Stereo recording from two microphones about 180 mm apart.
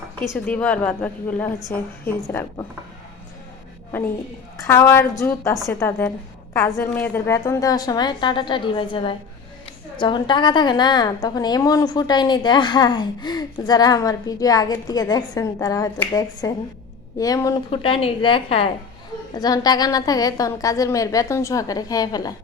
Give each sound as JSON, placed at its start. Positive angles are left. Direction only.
{"t": 0.2, "sound": "a woman's voice", "side_deg": 10}
{"t": 4.5, "sound": "a woman's voice", "side_deg": 15}
{"t": 17.7, "sound": "a woman's voice", "side_deg": 30}
{"t": 19.3, "sound": "a woman's voice", "side_deg": 20}